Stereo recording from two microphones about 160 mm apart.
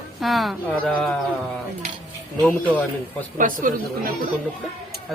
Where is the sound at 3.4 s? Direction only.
55° right (ahead or behind).